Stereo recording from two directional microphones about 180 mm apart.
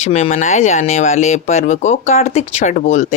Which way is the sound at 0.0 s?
35° left (ahead or behind).